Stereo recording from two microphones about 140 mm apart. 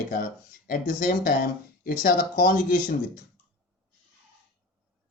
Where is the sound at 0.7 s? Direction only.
75° left (ahead or behind).